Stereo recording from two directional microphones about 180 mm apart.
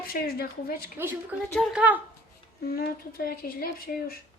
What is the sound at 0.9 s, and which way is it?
Speech, 10° right (ahead or behind).